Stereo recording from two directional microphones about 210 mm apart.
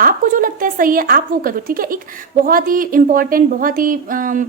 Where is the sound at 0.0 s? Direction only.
40° right (ahead or behind).